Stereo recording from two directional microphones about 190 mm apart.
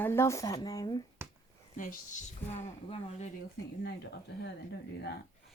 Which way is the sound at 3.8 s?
60° left (ahead or behind).